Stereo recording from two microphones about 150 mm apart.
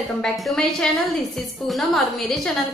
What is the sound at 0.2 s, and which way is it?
A woman's voice, 5° left (ahead or behind).